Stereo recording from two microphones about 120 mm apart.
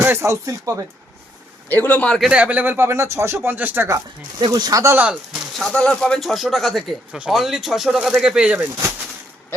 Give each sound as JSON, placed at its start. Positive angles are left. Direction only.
{"t": 0.0, "sound": "speech", "side_deg": -20}
{"t": 1.7, "sound": "a man's voice", "side_deg": 15}
{"t": 2.3, "sound": "speech", "side_deg": -10}
{"t": 3.9, "sound": "speech", "side_deg": -35}
{"t": 5.3, "sound": "speech", "side_deg": 0}